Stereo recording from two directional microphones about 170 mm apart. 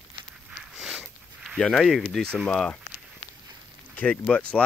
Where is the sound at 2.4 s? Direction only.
5° left (ahead or behind).